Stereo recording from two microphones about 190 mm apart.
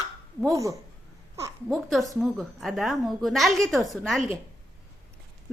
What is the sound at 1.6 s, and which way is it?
A woman's voice, centre (ahead or behind).